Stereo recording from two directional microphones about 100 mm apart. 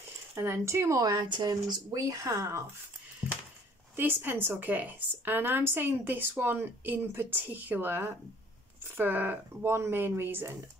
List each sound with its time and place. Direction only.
0.4 s speech: 25° right (ahead or behind)
3.2 s a sound: 15° right (ahead or behind)
3.9 s speech: 20° right (ahead or behind)